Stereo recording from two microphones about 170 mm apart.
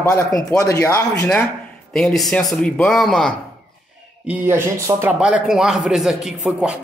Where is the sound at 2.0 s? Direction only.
Centre (ahead or behind).